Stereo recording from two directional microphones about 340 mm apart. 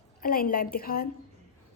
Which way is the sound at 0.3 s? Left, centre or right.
Left.